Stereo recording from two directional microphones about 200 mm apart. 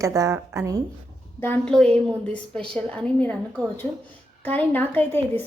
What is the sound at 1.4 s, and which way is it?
A woman's voice, 10° left (ahead or behind).